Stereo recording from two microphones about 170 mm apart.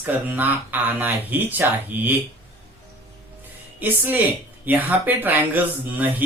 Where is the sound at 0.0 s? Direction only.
10° right (ahead or behind).